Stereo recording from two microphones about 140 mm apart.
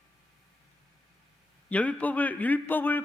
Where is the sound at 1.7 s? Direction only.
10° left (ahead or behind).